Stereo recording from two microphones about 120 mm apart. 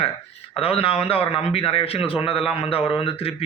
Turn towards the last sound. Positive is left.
turn(degrees=50)  # may be behind; listen again after turning